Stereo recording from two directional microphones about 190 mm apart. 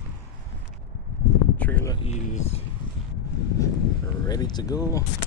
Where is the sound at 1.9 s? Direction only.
35° left (ahead or behind).